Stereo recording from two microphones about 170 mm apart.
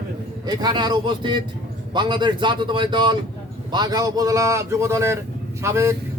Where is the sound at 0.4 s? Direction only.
25° right (ahead or behind).